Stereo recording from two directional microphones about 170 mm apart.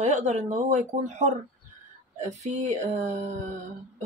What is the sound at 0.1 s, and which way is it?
Speech, 45° right (ahead or behind).